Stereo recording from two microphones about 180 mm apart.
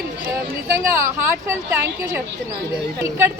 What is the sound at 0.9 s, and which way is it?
Speech, 15° right (ahead or behind).